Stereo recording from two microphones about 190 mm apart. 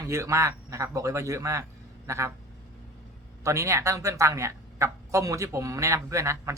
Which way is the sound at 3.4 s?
15° right (ahead or behind).